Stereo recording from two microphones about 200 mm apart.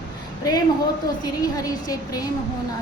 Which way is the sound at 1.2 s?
20° left (ahead or behind).